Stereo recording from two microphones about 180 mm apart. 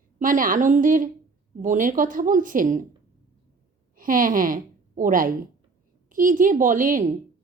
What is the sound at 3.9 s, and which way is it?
A woman's voice, 50° right (ahead or behind).